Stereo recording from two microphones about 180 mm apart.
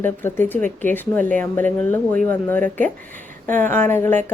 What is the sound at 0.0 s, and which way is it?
A woman's voice, 10° left (ahead or behind).